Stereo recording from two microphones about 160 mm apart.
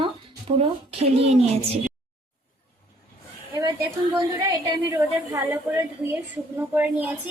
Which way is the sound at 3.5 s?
25° right (ahead or behind).